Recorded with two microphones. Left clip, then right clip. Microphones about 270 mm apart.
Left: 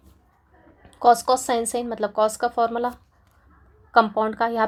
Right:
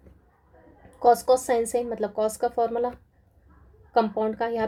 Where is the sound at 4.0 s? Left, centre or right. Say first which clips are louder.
Left 5 dB; centre.